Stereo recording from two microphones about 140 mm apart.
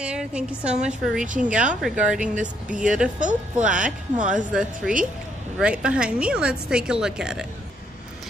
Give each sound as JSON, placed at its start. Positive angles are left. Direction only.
{"t": 0.0, "sound": "a woman's voice", "side_deg": -5}
{"t": 3.2, "sound": "speech", "side_deg": -65}
{"t": 3.6, "sound": "a woman's voice", "side_deg": -5}